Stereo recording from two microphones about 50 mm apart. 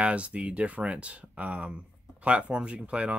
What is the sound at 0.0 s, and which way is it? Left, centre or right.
Speech, right.